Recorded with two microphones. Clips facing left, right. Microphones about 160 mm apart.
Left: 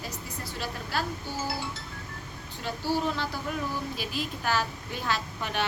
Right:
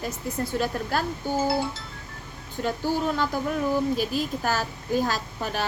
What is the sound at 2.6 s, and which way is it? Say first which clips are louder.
Music: right 3 dB; 50° right (ahead or behind).